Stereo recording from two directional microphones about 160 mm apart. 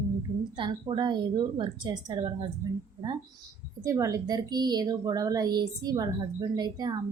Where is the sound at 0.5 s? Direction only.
30° right (ahead or behind).